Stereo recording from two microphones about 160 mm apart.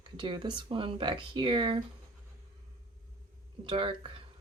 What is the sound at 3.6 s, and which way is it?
Speech, 30° right (ahead or behind).